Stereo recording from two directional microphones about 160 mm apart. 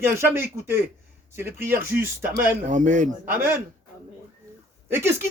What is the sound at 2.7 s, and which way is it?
Speech, 50° right (ahead or behind).